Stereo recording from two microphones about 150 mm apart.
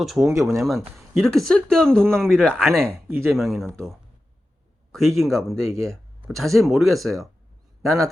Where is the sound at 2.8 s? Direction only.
20° right (ahead or behind).